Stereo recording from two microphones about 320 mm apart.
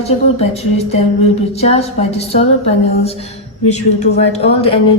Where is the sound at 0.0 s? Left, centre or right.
Centre.